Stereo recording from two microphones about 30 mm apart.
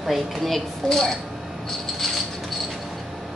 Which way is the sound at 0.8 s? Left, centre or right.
Centre.